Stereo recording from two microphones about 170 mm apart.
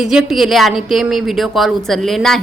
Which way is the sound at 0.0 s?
Centre (ahead or behind).